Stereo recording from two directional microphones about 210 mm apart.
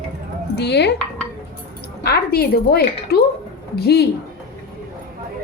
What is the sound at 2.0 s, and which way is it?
A woman's voice, 50° left (ahead or behind).